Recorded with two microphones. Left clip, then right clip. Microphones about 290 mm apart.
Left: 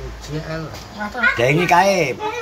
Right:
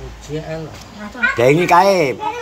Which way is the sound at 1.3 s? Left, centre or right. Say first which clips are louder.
Right 5 dB; centre.